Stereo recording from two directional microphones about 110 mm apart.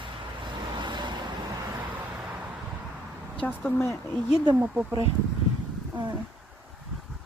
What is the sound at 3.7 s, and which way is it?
Speech, 20° left (ahead or behind).